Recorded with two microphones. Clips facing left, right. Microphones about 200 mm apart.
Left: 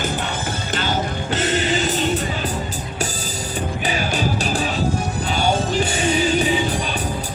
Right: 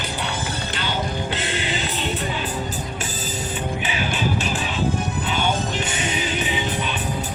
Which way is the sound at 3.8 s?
40° left (ahead or behind).